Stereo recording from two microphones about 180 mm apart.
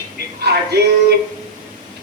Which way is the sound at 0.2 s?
65° right (ahead or behind).